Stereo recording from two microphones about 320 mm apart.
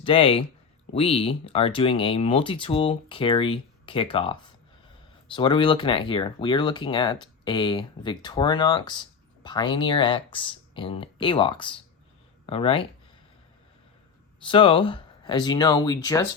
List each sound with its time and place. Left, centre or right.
0.0 s speech: centre
14.4 s speech: centre